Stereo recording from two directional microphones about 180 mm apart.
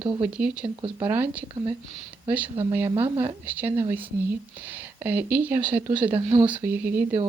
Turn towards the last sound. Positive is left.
turn(degrees=-10)  # may be behind; listen again after turning